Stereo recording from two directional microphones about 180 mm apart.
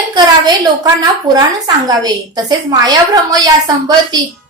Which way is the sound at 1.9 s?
20° right (ahead or behind).